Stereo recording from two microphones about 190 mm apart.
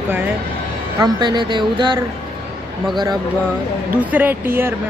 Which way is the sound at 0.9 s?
20° right (ahead or behind).